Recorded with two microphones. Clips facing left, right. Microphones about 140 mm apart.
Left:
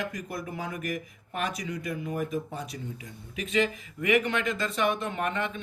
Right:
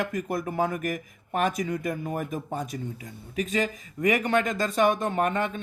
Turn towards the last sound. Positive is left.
turn(degrees=-45)  # may be behind; listen again after turning